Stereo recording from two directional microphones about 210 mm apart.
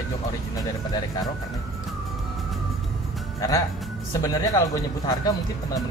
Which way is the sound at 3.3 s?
15° left (ahead or behind).